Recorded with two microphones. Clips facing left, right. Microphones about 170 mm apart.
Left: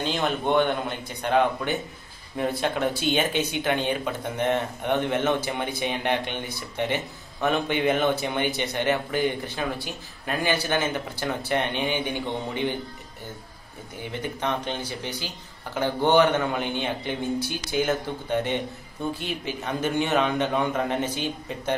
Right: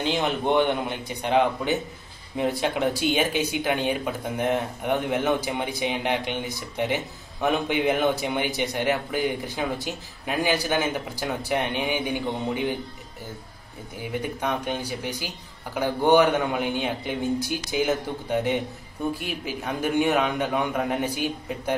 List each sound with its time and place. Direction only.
0.0 s speech: 15° right (ahead or behind)
14.2 s speech: 10° right (ahead or behind)